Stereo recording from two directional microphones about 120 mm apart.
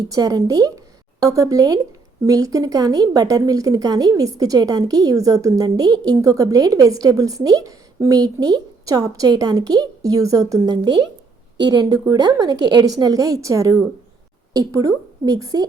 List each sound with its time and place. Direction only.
0.1 s a woman's voice: 30° right (ahead or behind)